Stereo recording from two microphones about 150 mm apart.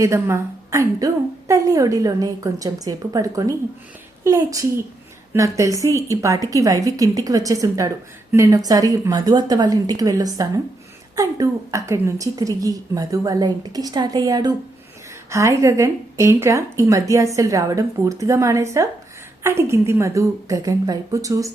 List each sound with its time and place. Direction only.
0.0 s a woman's voice: 20° right (ahead or behind)